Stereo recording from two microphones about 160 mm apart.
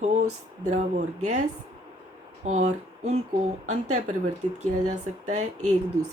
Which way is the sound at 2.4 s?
45° right (ahead or behind).